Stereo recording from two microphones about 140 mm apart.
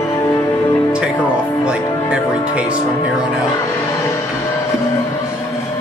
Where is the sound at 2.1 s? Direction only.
5° right (ahead or behind).